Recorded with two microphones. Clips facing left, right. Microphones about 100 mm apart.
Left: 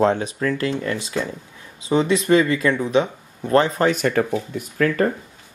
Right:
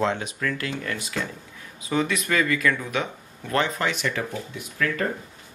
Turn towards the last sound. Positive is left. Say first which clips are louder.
# left 7 dB
turn(degrees=40)  # may be behind; listen again after turning